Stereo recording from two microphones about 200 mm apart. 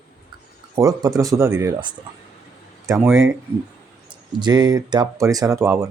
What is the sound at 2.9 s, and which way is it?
Speech, centre (ahead or behind).